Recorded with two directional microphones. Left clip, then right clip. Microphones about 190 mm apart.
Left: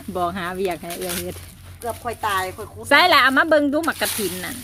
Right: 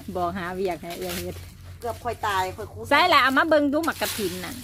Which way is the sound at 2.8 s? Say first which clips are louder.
Left 4 dB; 5° left (ahead or behind).